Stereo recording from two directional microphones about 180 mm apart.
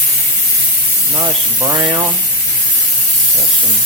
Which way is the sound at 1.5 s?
20° right (ahead or behind).